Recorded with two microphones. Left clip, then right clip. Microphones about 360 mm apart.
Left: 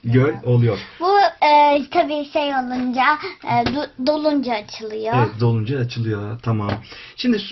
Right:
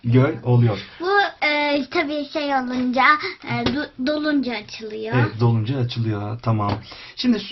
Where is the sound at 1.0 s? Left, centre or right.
Centre.